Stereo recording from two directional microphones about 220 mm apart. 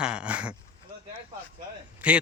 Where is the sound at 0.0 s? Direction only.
5° right (ahead or behind).